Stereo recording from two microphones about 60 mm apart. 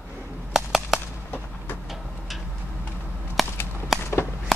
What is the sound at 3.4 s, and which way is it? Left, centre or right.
Whip, centre.